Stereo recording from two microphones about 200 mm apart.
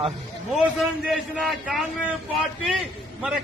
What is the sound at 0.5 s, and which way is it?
A man's voice, centre (ahead or behind).